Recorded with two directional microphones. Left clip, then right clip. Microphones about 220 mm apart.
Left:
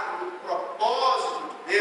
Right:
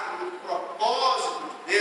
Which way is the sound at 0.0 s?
10° left (ahead or behind).